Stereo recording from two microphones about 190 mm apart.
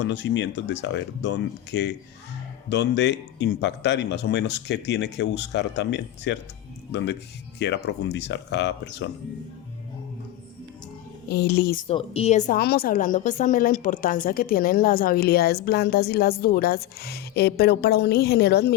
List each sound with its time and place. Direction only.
0.0 s speech: 65° left (ahead or behind)
11.3 s speech: 60° left (ahead or behind)
11.9 s a woman's voice: 30° left (ahead or behind)
12.5 s a woman's voice: 55° left (ahead or behind)